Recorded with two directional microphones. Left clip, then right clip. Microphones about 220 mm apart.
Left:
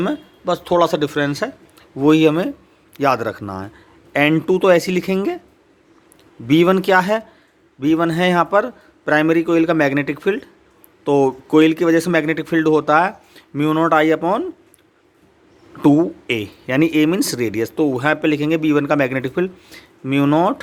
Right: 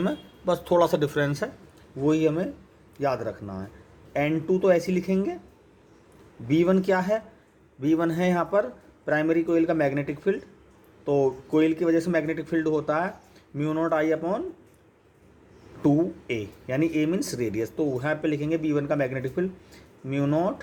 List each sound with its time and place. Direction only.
0.0 s a man's voice: 20° left (ahead or behind)
2.0 s speech: 35° left (ahead or behind)
6.5 s a man's voice: 30° left (ahead or behind)
15.8 s speech: 35° left (ahead or behind)